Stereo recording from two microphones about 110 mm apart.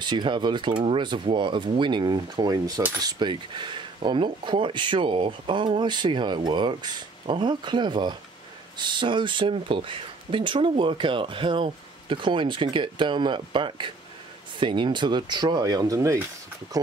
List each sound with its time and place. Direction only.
0.0 s speech: 45° right (ahead or behind); by 16.3 s 25° right (ahead or behind)